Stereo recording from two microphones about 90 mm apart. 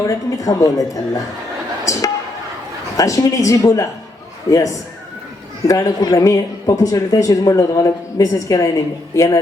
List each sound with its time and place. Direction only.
0.0 s a woman's voice: 40° left (ahead or behind)
1.8 s music: 35° left (ahead or behind)
3.0 s a woman's voice: 40° left (ahead or behind)